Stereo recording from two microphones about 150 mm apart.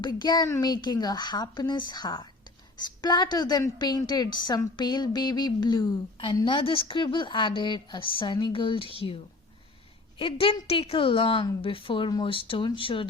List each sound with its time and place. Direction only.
0.0 s a woman's voice: 30° left (ahead or behind)
10.2 s a woman's voice: 35° left (ahead or behind)